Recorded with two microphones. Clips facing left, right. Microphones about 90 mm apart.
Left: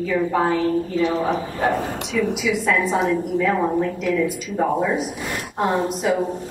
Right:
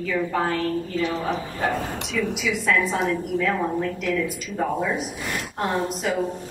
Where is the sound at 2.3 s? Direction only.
Centre (ahead or behind).